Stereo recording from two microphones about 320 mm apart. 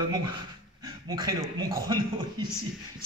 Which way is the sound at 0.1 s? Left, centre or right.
Centre.